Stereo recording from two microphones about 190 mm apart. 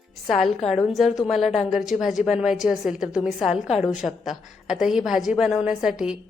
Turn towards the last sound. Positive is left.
turn(degrees=-5)  # may be behind; listen again after turning